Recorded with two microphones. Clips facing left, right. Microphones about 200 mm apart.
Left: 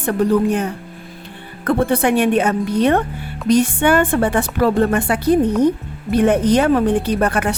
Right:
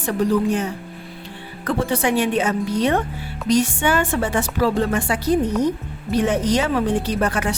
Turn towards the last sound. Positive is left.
turn(degrees=55)  # may be behind; listen again after turning